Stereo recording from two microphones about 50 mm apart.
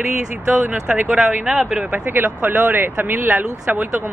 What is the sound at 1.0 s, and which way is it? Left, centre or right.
Speech, centre.